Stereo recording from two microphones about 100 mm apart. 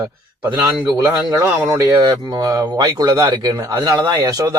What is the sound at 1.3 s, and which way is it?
Speech, 30° right (ahead or behind).